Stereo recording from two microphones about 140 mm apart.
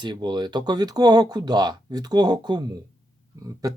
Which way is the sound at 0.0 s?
30° right (ahead or behind).